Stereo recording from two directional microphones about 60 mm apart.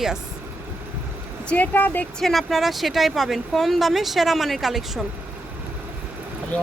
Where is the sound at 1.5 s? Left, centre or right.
Left.